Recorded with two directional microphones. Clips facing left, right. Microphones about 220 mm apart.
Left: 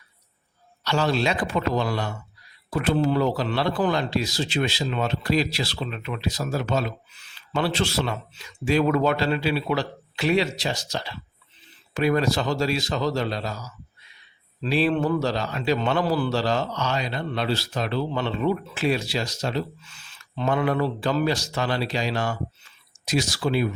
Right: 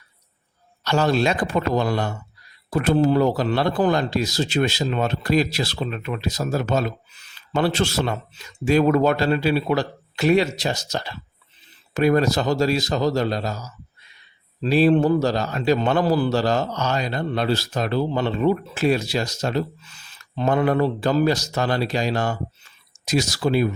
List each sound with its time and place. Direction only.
0.9 s a man's voice: 45° right (ahead or behind)